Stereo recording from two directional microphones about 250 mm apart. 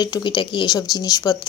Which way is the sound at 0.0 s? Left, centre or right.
Centre.